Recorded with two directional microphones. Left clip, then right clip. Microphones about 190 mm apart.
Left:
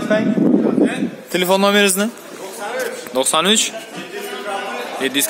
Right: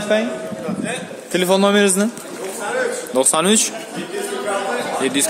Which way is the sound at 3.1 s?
10° right (ahead or behind).